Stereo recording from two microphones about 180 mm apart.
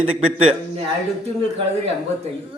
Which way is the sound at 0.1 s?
35° right (ahead or behind).